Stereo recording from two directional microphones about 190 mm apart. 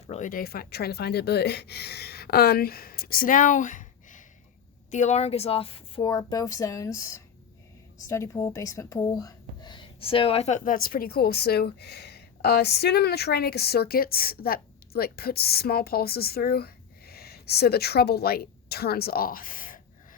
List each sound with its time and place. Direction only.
0.1 s speech: 45° left (ahead or behind)